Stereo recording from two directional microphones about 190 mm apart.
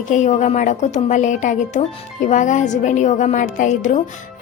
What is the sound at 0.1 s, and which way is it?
A woman's voice, 40° left (ahead or behind).